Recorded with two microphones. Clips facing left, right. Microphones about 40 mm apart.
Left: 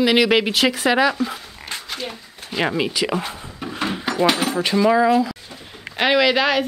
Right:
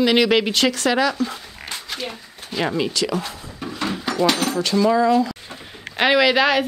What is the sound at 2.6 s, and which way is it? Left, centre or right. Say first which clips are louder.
Speech: left 1 dB; centre.